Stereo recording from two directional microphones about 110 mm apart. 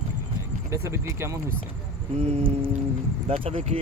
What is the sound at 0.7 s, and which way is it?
Speech, 25° right (ahead or behind).